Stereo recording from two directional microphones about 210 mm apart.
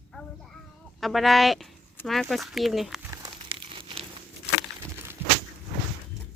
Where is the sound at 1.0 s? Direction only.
Centre (ahead or behind).